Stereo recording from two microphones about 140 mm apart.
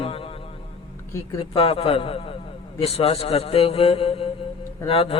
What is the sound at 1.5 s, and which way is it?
A man's voice, 40° left (ahead or behind).